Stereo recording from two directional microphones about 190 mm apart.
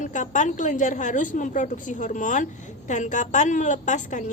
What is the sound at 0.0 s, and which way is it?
A woman's voice, 40° left (ahead or behind).